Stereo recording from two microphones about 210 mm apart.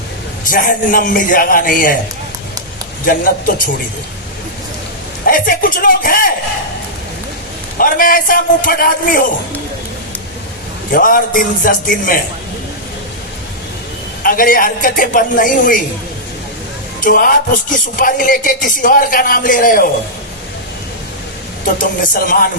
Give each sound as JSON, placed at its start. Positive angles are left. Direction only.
{"t": 0.4, "sound": "a man's voice", "side_deg": 40}
{"t": 3.1, "sound": "a man's voice", "side_deg": 40}
{"t": 5.2, "sound": "a man's voice", "side_deg": 40}
{"t": 7.8, "sound": "a man's voice", "side_deg": 40}
{"t": 10.9, "sound": "a man's voice", "side_deg": 40}
{"t": 14.3, "sound": "a man's voice", "side_deg": 40}
{"t": 17.0, "sound": "a man's voice", "side_deg": 40}
{"t": 21.6, "sound": "a man's voice", "side_deg": 40}